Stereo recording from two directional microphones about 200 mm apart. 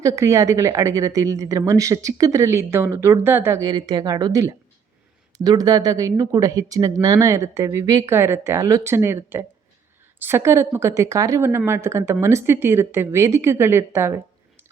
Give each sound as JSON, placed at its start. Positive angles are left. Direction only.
{"t": 0.0, "sound": "speech", "side_deg": -15}